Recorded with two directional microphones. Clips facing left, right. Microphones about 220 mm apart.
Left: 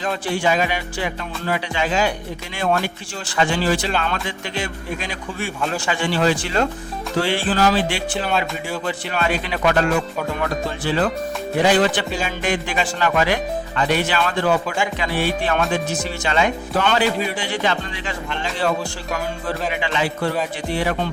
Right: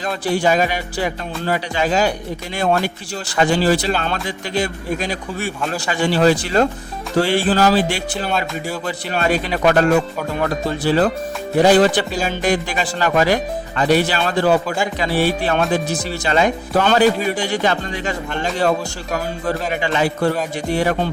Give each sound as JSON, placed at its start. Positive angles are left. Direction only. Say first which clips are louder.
{"t": 0.3, "sound": "speech", "louder": "right 4 dB", "side_deg": -40}
{"t": 3.3, "sound": "speech", "louder": "right 4 dB", "side_deg": -40}
{"t": 19.1, "sound": "speech", "louder": "right 4 dB", "side_deg": -45}